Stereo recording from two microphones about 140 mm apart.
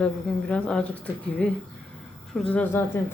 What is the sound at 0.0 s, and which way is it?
Speech, 5° left (ahead or behind).